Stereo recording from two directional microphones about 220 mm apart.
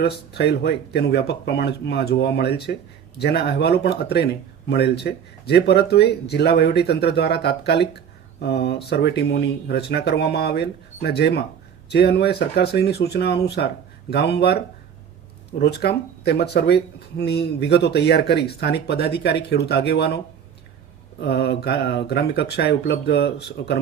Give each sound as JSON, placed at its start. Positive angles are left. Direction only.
{"t": 0.0, "sound": "speech", "side_deg": 50}
{"t": 15.6, "sound": "speech", "side_deg": 45}
{"t": 21.2, "sound": "speech", "side_deg": 50}